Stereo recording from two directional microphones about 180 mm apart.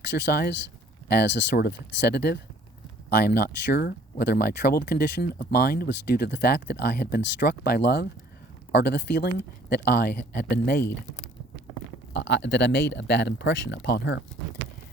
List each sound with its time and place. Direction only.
0.2 s speech: 65° left (ahead or behind)
12.1 s speech: 80° left